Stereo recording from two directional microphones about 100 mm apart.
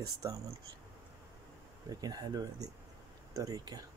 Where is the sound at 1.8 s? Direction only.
40° right (ahead or behind).